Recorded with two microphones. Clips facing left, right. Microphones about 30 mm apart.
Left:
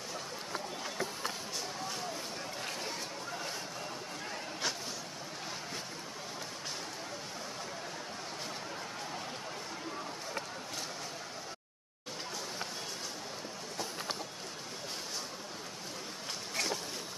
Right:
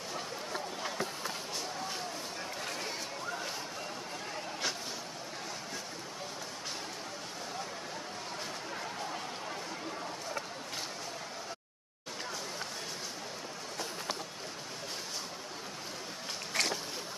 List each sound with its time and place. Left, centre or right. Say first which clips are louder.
16.6 s boat: right 4 dB; right